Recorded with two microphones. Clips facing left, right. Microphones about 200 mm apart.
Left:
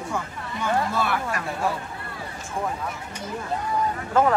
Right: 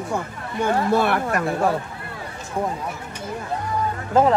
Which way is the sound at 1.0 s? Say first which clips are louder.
Right 5 dB; 55° right (ahead or behind).